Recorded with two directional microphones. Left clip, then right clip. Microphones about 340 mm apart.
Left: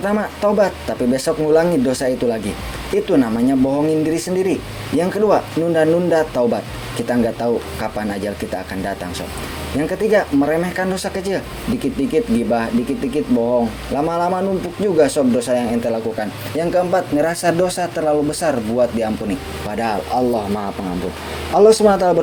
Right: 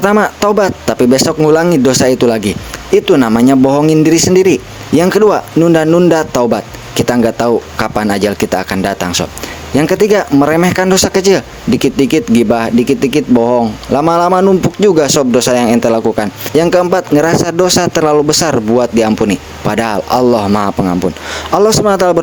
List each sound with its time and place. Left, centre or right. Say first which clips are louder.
0.0 s speech: right 8 dB; right